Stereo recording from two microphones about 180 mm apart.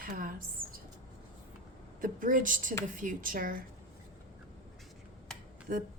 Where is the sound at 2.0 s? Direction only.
50° right (ahead or behind).